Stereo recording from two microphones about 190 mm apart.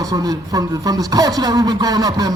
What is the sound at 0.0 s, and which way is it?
Speech, 20° right (ahead or behind).